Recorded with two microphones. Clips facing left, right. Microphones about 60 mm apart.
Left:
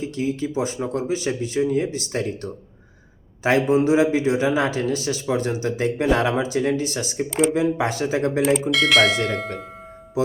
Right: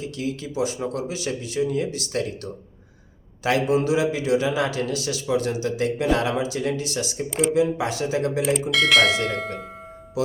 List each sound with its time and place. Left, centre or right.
0.0 s speech: left
8.7 s speech: centre